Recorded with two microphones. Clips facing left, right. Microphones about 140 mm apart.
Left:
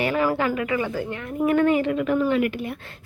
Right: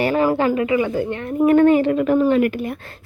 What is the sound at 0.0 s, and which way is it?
A woman's voice, 35° right (ahead or behind).